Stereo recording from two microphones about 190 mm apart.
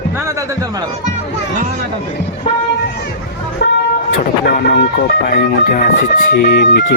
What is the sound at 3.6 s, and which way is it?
Vehicle, 55° left (ahead or behind).